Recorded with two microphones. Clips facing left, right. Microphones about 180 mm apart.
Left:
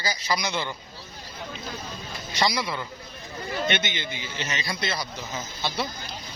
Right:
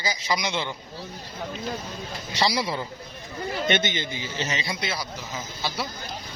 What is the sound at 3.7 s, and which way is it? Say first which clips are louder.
Speech: right 5 dB; 45° right (ahead or behind).